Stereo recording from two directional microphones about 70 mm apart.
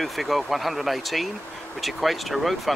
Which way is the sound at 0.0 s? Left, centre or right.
Centre.